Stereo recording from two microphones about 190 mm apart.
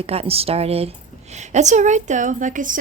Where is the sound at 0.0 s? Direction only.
30° right (ahead or behind).